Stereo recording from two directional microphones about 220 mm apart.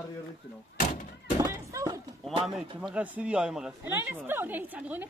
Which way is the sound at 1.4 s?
15° right (ahead or behind).